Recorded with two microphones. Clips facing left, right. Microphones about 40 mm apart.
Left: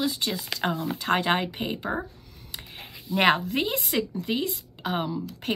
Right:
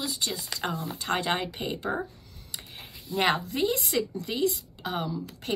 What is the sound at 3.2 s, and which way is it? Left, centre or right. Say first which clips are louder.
Speech: left 3 dB; left.